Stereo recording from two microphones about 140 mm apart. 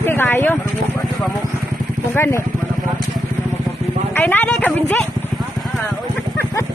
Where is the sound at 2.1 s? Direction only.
20° left (ahead or behind).